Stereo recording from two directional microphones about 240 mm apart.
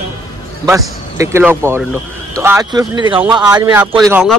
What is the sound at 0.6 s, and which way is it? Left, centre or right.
Speech, centre.